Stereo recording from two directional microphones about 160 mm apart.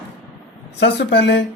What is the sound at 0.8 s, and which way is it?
Speech, 90° left.